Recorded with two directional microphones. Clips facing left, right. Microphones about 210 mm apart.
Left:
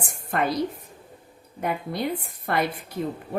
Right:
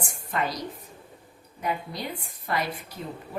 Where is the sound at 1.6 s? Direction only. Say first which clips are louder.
Left 4 dB; 55° left (ahead or behind).